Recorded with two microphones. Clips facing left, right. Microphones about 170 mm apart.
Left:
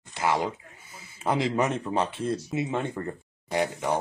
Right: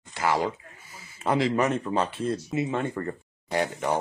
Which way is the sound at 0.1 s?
25° left (ahead or behind).